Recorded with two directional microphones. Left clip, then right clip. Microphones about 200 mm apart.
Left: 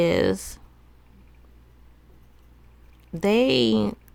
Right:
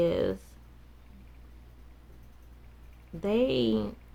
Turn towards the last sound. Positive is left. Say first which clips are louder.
# left 7 dB
turn(degrees=60)  # may be behind; listen again after turning